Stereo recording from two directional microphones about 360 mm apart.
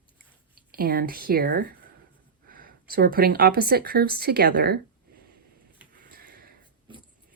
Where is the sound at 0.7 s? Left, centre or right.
Right.